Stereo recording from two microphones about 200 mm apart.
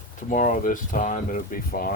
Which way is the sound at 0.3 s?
40° left (ahead or behind).